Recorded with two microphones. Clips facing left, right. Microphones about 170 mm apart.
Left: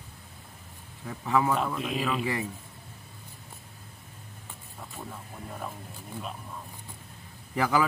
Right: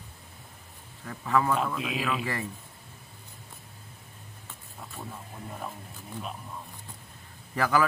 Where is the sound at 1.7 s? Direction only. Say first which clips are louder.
Left 1 dB; centre (ahead or behind).